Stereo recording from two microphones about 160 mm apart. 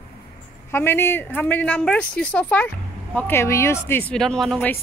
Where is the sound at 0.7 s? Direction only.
15° left (ahead or behind).